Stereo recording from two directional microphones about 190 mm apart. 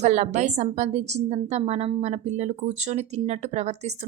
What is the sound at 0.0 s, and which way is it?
A woman's voice, 40° right (ahead or behind).